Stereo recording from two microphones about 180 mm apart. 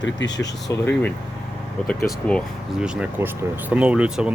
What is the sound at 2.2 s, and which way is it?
Speech, 10° left (ahead or behind).